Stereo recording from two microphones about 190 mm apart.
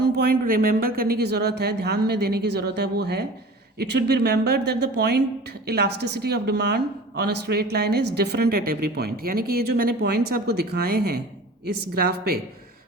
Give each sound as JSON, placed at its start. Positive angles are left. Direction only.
{"t": 0.0, "sound": "a woman's voice", "side_deg": -55}